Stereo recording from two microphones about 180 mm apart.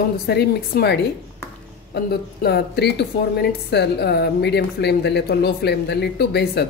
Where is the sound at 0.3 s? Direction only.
65° left (ahead or behind).